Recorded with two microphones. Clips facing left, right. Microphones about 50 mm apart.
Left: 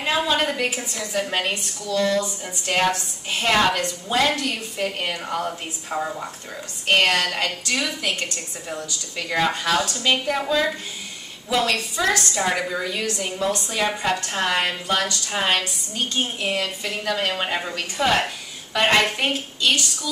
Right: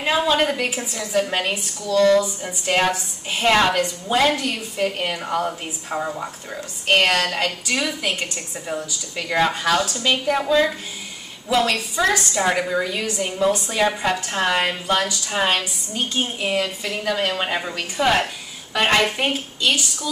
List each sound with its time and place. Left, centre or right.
0.0 s a woman's voice: centre
2.1 s a woman's voice: centre